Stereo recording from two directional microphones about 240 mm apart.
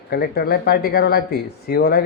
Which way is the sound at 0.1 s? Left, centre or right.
Left.